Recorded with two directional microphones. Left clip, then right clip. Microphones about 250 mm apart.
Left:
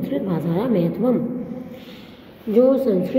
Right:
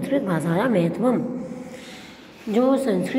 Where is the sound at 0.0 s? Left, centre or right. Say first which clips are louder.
Right 1 dB; centre.